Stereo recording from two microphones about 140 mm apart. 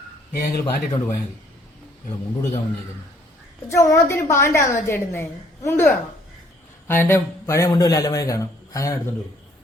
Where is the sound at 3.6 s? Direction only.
20° left (ahead or behind).